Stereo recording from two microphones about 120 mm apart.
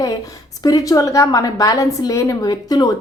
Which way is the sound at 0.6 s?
30° left (ahead or behind).